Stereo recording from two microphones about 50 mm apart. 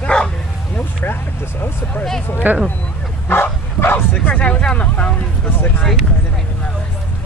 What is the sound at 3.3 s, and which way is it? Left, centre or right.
Bow-wow, left.